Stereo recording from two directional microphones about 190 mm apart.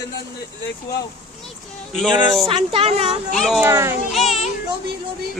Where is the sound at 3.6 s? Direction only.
15° right (ahead or behind).